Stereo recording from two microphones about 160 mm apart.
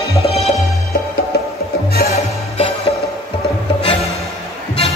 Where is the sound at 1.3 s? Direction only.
80° left.